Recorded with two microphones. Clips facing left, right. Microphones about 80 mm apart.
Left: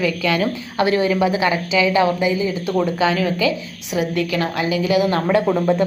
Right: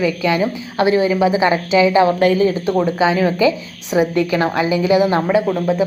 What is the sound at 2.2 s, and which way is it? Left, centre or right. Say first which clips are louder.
Speech: right 6 dB; right.